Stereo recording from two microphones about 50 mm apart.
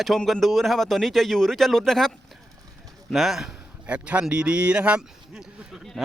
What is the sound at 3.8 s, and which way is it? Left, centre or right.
A man's voice, right.